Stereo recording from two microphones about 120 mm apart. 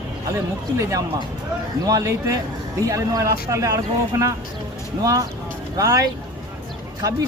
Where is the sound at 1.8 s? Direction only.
25° right (ahead or behind).